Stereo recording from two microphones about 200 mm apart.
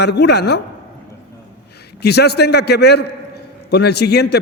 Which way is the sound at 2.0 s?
55° left (ahead or behind).